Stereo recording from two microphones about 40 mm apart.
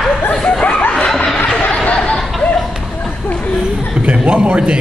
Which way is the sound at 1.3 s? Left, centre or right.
Left.